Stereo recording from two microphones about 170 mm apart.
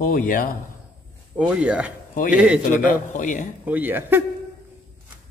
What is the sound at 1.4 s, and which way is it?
A man's voice, 5° right (ahead or behind).